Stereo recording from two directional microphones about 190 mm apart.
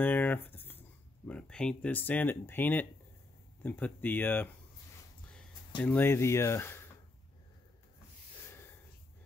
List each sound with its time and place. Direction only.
0.0 s speech: 10° left (ahead or behind)
5.8 s speech: 10° left (ahead or behind)